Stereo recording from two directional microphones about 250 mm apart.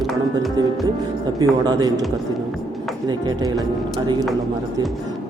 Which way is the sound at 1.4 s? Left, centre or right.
Centre.